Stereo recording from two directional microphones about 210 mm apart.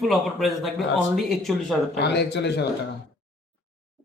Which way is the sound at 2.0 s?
55° left (ahead or behind).